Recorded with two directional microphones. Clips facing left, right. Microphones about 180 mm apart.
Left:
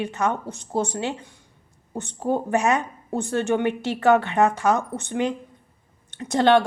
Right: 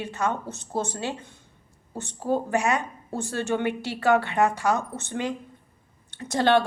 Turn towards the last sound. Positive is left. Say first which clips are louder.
# left 3 dB
turn(degrees=15)  # may be behind; listen again after turning